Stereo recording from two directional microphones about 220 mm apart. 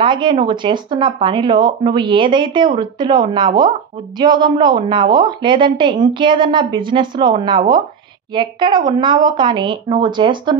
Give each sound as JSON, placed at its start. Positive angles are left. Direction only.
{"t": 0.0, "sound": "a woman's voice", "side_deg": -20}